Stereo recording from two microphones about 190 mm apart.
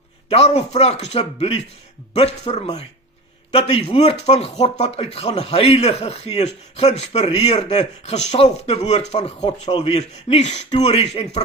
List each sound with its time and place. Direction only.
0.3 s speech: 35° left (ahead or behind)